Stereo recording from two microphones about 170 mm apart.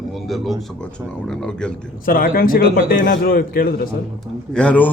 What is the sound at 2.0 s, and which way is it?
A man's voice, 55° left (ahead or behind).